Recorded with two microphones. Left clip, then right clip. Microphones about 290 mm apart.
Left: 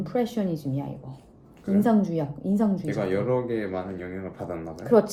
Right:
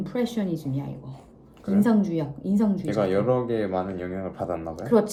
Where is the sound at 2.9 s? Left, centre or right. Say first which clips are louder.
Right 5 dB; centre.